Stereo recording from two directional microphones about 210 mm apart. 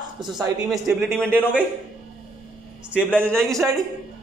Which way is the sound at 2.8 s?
10° right (ahead or behind).